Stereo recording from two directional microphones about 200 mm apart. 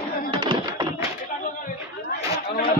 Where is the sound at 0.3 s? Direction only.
25° right (ahead or behind).